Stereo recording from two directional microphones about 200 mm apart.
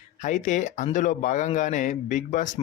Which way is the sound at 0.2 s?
40° left (ahead or behind).